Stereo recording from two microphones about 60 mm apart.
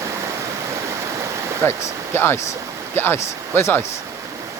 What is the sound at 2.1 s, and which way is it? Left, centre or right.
Speech, left.